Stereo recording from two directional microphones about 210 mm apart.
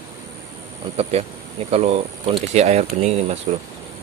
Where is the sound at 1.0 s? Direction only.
30° right (ahead or behind).